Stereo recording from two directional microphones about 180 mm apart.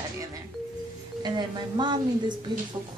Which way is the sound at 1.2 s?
25° right (ahead or behind).